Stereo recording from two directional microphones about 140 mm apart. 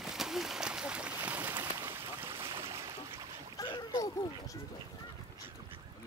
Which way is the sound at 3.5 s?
30° left (ahead or behind).